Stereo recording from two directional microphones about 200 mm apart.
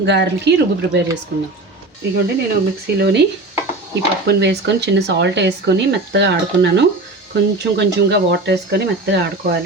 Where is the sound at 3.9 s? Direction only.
60° right (ahead or behind).